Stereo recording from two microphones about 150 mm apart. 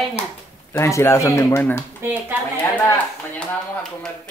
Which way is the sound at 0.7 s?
20° left (ahead or behind).